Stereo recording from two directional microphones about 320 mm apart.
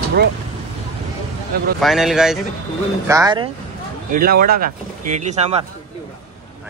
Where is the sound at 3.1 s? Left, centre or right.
Centre.